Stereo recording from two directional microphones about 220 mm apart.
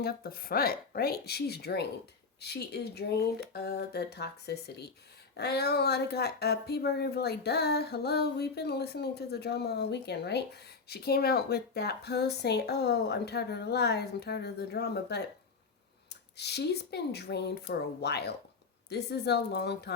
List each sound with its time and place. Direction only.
0.0 s speech: 45° left (ahead or behind)